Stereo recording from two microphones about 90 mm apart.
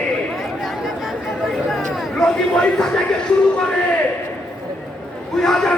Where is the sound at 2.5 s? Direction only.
10° left (ahead or behind).